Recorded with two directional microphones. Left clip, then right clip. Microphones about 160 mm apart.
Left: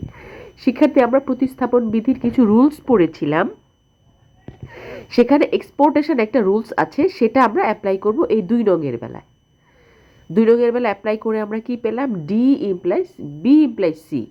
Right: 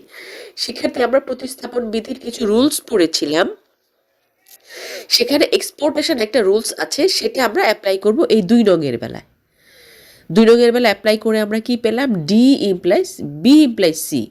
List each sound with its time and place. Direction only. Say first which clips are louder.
0.1 s a woman's voice: right 4 dB; 25° right (ahead or behind)
2.9 s speech: right 1 dB; 35° right (ahead or behind)
4.6 s speech: right 4 dB; 25° right (ahead or behind)
10.3 s speech: right 4 dB; 20° right (ahead or behind)